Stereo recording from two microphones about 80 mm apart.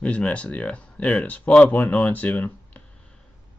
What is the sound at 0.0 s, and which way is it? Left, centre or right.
Speech, centre.